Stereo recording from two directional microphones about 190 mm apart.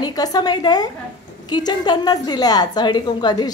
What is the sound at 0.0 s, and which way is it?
A woman's voice, 20° left (ahead or behind).